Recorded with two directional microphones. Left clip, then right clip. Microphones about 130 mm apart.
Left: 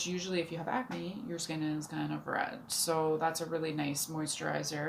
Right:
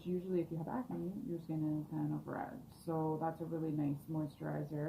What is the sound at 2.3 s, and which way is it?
Speech, 25° left (ahead or behind).